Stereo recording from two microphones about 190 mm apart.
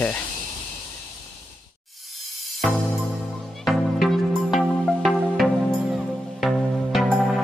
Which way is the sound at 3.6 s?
Centre (ahead or behind).